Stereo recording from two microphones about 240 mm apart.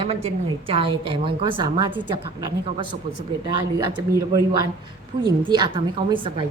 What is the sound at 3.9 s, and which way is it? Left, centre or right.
A woman's voice, centre.